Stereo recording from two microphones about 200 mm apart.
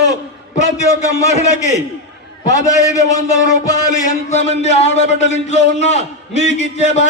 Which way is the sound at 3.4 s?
15° left (ahead or behind).